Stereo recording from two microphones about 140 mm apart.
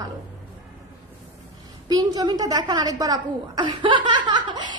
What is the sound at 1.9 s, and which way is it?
A woman's voice, 30° right (ahead or behind).